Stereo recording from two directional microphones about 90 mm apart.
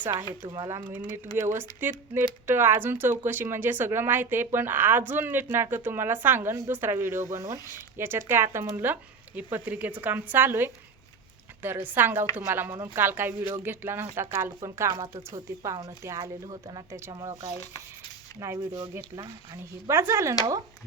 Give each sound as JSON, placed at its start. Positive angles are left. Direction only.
{"t": 0.0, "sound": "speech", "side_deg": -25}
{"t": 0.4, "sound": "speech", "side_deg": -45}
{"t": 0.9, "sound": "speech", "side_deg": -25}
{"t": 8.9, "sound": "speech", "side_deg": -20}
{"t": 18.3, "sound": "speech", "side_deg": -35}
{"t": 19.9, "sound": "speech", "side_deg": -30}